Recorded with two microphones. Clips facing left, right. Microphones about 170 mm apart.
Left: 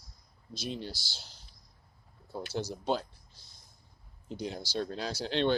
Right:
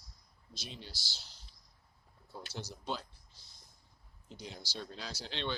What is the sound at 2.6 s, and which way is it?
Speech, 55° left (ahead or behind).